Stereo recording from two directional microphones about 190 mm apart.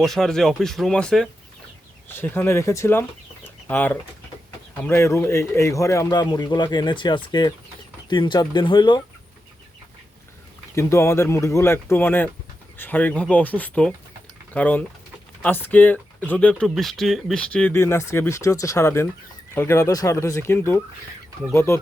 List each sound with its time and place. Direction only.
0.0 s speech: centre (ahead or behind); by 9.0 s 25° left (ahead or behind)
10.8 s speech: 15° left (ahead or behind)